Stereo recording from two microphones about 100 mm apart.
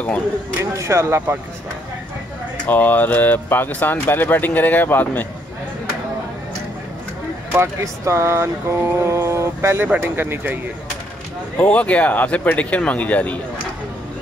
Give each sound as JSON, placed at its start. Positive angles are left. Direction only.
{"t": 0.7, "sound": "speech", "side_deg": -30}
{"t": 2.6, "sound": "speech", "side_deg": 15}
{"t": 7.5, "sound": "speech", "side_deg": -30}
{"t": 11.5, "sound": "speech", "side_deg": 10}